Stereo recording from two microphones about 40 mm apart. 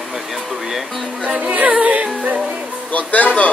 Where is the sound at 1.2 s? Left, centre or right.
Right.